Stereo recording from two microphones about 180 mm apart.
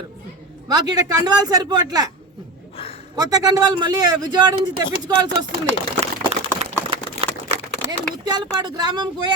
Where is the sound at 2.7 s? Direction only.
30° left (ahead or behind).